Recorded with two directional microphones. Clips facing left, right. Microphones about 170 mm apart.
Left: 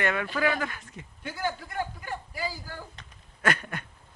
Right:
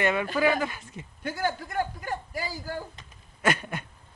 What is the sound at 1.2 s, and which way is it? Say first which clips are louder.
A man's voice: right 3 dB; 45° right (ahead or behind).